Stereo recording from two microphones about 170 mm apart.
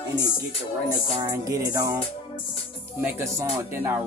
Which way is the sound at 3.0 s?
15° right (ahead or behind).